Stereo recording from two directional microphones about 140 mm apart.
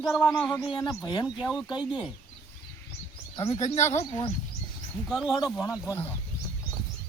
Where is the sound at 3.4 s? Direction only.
50° left (ahead or behind).